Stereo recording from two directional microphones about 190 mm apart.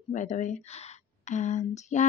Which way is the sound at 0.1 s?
40° left (ahead or behind).